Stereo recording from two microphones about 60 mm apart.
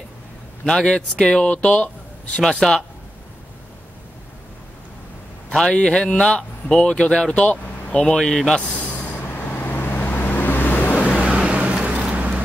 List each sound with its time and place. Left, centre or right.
0.7 s speech: centre
2.6 s speech: centre
5.5 s speech: centre
8.5 s vehicle: left
11.2 s vehicle: centre